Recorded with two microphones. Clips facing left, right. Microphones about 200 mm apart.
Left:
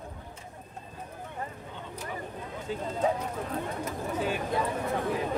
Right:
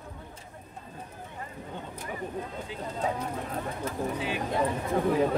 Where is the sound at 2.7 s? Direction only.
45° left (ahead or behind).